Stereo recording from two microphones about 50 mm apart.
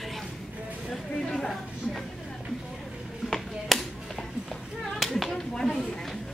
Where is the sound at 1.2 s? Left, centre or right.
Centre.